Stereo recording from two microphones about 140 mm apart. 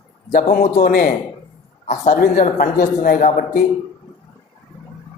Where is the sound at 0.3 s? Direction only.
75° left (ahead or behind).